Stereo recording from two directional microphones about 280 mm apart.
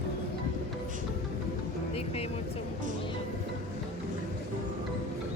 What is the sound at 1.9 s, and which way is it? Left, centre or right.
Vehicle, left.